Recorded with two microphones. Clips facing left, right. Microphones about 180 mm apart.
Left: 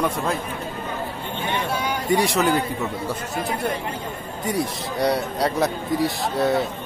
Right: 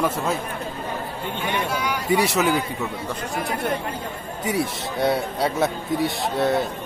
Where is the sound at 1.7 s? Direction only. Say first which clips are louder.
Even; 30° left (ahead or behind).